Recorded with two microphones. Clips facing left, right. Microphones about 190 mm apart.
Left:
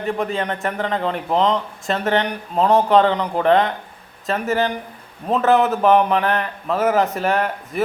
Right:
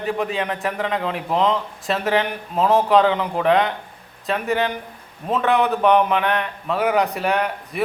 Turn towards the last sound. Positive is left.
turn(degrees=0)  # may be behind; listen again after turning